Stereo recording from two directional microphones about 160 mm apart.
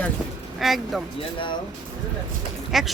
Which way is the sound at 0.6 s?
Centre (ahead or behind).